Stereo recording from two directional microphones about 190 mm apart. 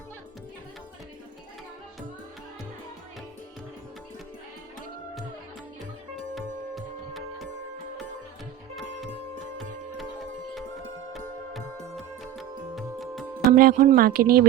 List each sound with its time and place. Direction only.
6.3 s music: centre (ahead or behind)
11.1 s music: centre (ahead or behind)
13.5 s speech: 45° right (ahead or behind)